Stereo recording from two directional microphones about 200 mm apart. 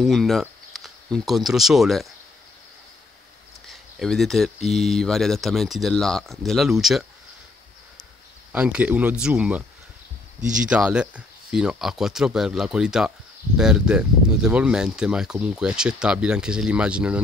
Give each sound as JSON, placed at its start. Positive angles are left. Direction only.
{"t": 0.0, "sound": "speech", "side_deg": 0}
{"t": 3.6, "sound": "speech", "side_deg": 0}
{"t": 8.5, "sound": "speech", "side_deg": -5}
{"t": 10.7, "sound": "speech", "side_deg": -5}